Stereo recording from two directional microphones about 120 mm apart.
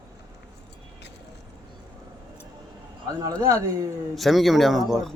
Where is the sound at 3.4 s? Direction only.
25° right (ahead or behind).